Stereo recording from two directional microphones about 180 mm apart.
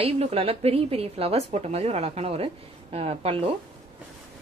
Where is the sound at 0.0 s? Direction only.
35° right (ahead or behind).